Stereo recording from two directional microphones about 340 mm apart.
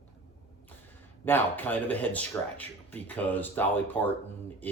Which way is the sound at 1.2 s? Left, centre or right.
Centre.